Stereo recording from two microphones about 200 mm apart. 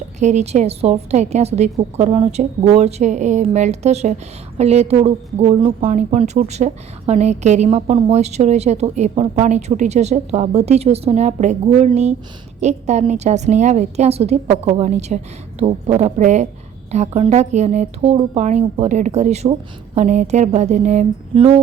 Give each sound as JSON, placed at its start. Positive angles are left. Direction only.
{"t": 0.2, "sound": "a woman's voice", "side_deg": -35}